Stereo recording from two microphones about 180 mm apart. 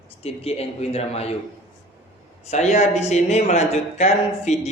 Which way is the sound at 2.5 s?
40° left (ahead or behind).